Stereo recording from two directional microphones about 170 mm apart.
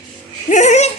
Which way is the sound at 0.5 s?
45° left (ahead or behind).